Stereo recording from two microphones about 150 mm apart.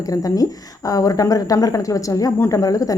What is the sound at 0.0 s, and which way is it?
A woman's voice, 25° left (ahead or behind).